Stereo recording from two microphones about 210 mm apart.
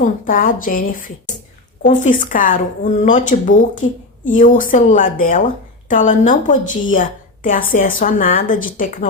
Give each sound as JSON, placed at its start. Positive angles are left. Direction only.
{"t": 0.0, "sound": "a woman's voice", "side_deg": 40}